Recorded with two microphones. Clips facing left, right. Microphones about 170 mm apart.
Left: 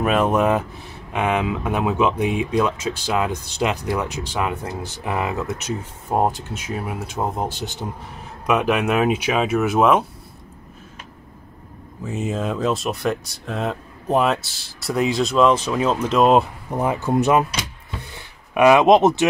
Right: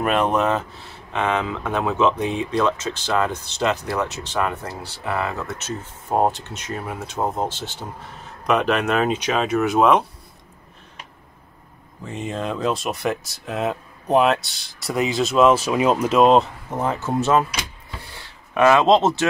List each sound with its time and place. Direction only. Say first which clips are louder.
0.0 s speech: left 2 dB; 5° left (ahead or behind)
12.0 s speech: left 3 dB; 5° left (ahead or behind)
16.3 s speech: even; 10° left (ahead or behind)
18.1 s a sound: left 1 dB; 15° left (ahead or behind)